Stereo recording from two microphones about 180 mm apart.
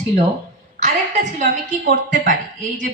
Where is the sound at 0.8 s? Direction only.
40° right (ahead or behind).